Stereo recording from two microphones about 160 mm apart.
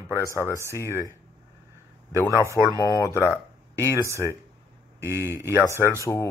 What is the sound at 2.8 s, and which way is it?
Speech, 20° left (ahead or behind).